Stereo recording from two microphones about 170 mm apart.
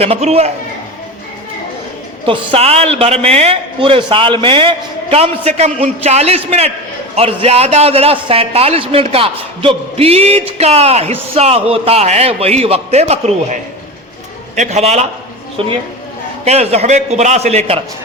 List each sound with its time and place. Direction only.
0.0 s a man's voice: 35° right (ahead or behind)
2.2 s a man's voice: 30° right (ahead or behind)
16.4 s a man's voice: 40° right (ahead or behind)